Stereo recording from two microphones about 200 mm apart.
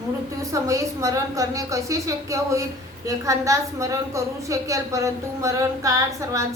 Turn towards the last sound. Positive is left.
turn(degrees=-15)  # may be behind; listen again after turning